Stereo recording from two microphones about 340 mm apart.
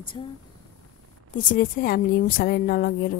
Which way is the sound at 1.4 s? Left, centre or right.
Left.